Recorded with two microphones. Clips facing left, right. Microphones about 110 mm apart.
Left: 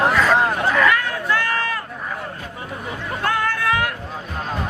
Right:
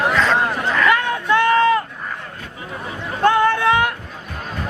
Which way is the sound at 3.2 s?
25° right (ahead or behind).